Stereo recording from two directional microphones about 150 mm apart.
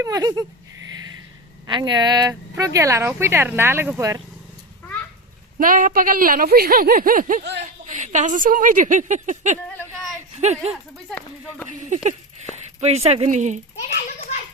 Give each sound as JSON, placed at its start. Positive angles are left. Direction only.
{"t": 0.0, "sound": "speech", "side_deg": -25}
{"t": 1.6, "sound": "speech", "side_deg": -30}
{"t": 5.5, "sound": "a woman's voice", "side_deg": -65}
{"t": 12.8, "sound": "speech", "side_deg": -45}